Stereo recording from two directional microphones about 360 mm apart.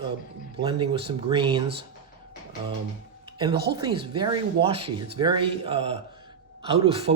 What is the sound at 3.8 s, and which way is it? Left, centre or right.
Speech, centre.